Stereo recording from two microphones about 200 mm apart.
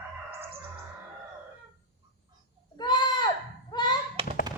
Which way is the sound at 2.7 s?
20° left (ahead or behind).